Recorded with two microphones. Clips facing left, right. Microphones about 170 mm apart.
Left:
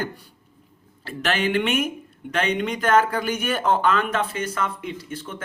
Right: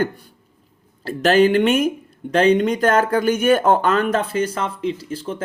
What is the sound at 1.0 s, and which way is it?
Speech, 40° right (ahead or behind).